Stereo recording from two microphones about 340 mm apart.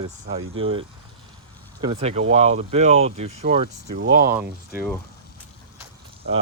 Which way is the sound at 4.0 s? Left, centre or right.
Right.